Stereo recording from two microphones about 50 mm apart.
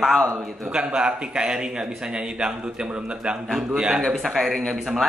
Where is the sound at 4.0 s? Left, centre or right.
Centre.